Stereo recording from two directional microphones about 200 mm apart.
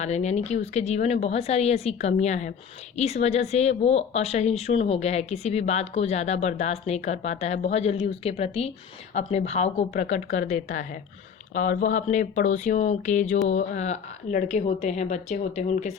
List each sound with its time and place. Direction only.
0.0 s speech: 35° left (ahead or behind)